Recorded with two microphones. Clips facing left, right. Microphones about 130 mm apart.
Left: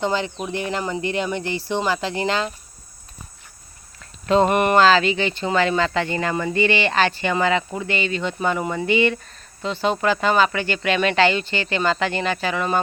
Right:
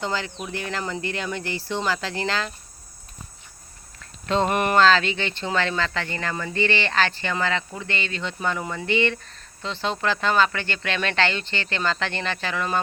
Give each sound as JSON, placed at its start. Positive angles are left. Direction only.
{"t": 0.0, "sound": "speech", "side_deg": 20}
{"t": 4.3, "sound": "speech", "side_deg": 5}